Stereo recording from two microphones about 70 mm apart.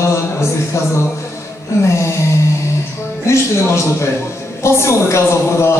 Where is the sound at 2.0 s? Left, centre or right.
Left.